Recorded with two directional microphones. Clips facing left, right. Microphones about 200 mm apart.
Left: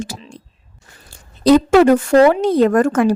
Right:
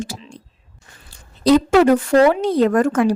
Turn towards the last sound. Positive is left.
turn(degrees=50)  # may be behind; listen again after turning